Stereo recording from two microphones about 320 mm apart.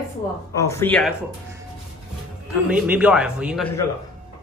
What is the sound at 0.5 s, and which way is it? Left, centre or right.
Speech, centre.